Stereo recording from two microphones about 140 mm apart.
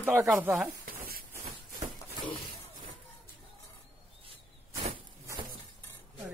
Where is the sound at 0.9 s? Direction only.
90° right.